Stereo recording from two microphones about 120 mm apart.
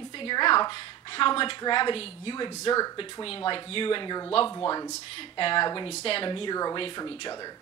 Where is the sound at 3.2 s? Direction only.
45° left (ahead or behind).